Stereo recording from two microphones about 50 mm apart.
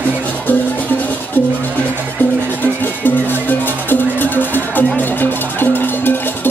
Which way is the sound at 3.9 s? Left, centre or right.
Left.